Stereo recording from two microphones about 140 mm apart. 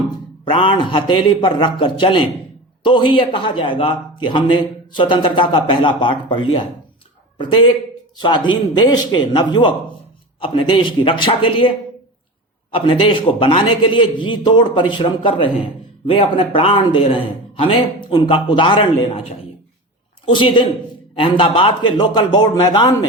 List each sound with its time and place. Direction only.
0.4 s a man's voice: 40° left (ahead or behind)
12.7 s a man's voice: 40° left (ahead or behind)
20.2 s a man's voice: 35° left (ahead or behind)